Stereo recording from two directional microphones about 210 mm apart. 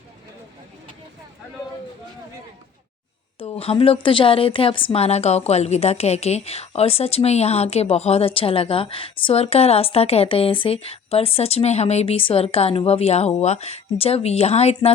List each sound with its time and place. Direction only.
3.3 s a woman's voice: 30° left (ahead or behind)